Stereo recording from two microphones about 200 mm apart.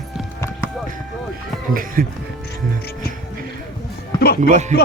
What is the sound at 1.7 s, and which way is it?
Speech, 45° right (ahead or behind).